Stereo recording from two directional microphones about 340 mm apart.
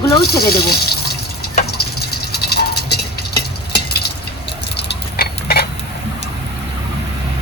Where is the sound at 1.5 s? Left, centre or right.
Left.